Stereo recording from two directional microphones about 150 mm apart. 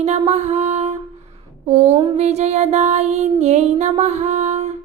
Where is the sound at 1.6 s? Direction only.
40° right (ahead or behind).